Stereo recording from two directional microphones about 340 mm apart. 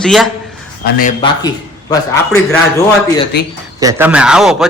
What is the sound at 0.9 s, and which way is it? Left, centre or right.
Speech, left.